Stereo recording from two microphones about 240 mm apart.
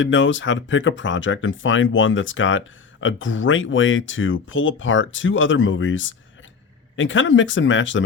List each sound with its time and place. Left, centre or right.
0.0 s speech: left